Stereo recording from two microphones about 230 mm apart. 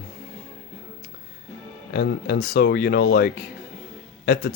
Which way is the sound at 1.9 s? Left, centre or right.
Left.